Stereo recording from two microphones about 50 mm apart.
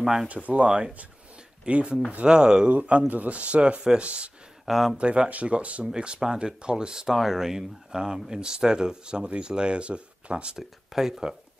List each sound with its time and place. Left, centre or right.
0.0 s speech: centre
0.3 s speech: right
2.7 s speech: right
4.6 s speech: centre
4.9 s speech: right
10.9 s speech: centre